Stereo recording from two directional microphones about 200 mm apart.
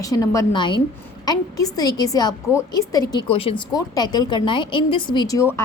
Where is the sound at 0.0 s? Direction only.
15° left (ahead or behind).